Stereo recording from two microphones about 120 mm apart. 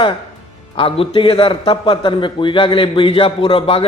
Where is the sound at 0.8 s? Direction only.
50° left (ahead or behind).